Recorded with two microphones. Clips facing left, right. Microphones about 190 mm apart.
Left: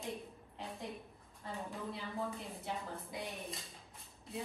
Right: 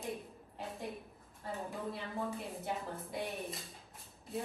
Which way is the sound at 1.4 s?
Centre (ahead or behind).